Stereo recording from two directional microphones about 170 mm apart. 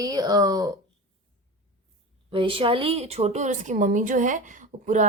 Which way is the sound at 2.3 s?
30° right (ahead or behind).